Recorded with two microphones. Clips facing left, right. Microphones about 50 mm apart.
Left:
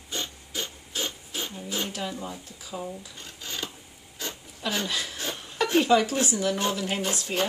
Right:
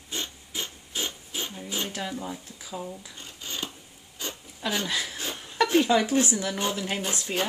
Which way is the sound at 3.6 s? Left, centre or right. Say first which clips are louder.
Even; centre.